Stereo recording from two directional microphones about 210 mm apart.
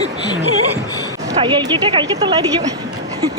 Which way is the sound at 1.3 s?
20° right (ahead or behind).